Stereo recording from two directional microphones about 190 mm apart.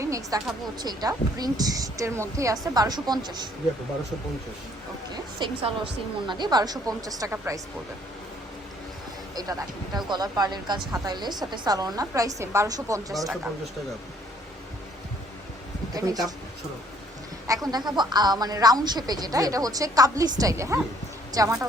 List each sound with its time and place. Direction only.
0.0 s a sound: 15° right (ahead or behind)
0.8 s a woman's voice: 20° right (ahead or behind)
5.1 s a woman's voice: 25° right (ahead or behind)
9.3 s a woman's voice: 20° right (ahead or behind)
16.0 s a woman's voice: 20° right (ahead or behind)
17.4 s a woman's voice: 20° right (ahead or behind)